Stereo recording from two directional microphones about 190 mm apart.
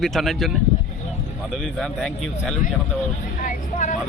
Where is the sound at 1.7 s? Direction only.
Centre (ahead or behind).